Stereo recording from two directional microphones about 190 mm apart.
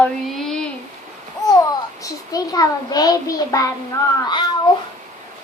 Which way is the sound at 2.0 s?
20° left (ahead or behind).